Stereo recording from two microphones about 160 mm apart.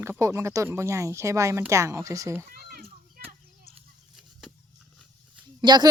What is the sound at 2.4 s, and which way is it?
Children playing, 65° right (ahead or behind).